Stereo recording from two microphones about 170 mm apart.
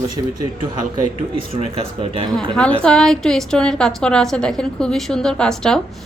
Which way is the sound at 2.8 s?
5° left (ahead or behind).